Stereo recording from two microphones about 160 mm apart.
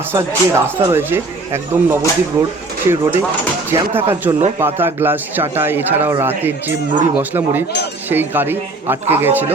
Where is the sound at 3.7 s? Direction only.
15° right (ahead or behind).